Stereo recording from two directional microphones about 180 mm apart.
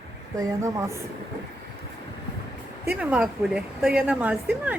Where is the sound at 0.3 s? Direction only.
15° right (ahead or behind).